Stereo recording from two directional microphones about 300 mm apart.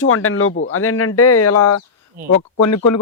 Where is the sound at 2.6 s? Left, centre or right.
Left.